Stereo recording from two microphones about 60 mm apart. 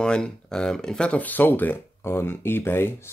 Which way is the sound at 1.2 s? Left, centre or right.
Left.